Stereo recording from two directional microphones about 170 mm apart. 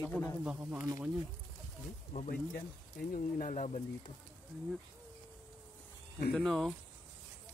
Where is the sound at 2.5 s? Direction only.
60° left (ahead or behind).